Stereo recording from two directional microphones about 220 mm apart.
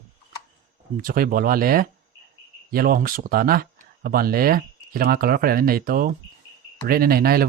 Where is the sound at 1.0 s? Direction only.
40° right (ahead or behind).